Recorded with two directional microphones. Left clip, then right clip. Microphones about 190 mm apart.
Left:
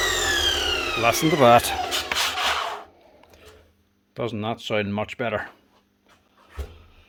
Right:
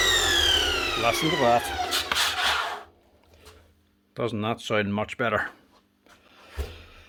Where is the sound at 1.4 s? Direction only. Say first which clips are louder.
Left 9 dB; 50° left (ahead or behind).